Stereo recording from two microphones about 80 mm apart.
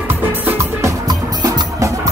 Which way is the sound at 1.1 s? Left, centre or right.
Right.